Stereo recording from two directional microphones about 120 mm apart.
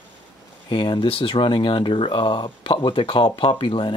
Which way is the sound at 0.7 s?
45° left (ahead or behind).